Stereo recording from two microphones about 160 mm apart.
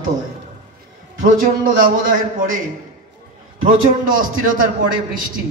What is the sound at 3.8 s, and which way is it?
Speech, 60° right (ahead or behind).